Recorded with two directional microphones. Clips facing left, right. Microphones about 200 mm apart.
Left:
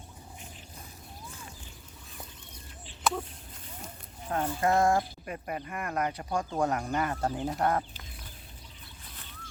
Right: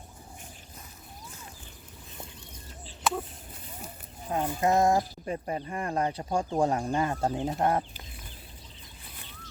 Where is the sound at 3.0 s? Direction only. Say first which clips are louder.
Right 1 dB; 5° right (ahead or behind).